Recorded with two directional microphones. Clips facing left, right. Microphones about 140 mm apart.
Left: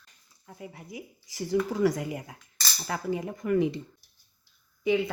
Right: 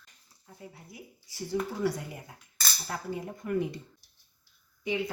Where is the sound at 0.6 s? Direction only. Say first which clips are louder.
Left 6 dB; 90° left.